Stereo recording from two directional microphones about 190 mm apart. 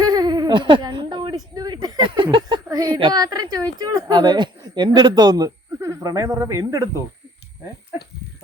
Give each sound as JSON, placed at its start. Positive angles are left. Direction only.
{"t": 0.0, "sound": "speech", "side_deg": -20}